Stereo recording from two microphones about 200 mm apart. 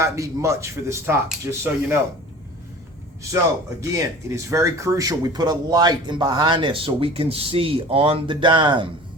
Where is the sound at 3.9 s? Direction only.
15° right (ahead or behind).